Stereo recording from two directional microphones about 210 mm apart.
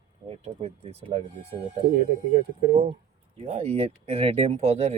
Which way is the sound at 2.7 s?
30° right (ahead or behind).